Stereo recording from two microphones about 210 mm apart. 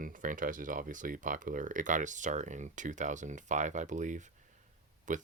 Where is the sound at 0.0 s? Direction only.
40° right (ahead or behind).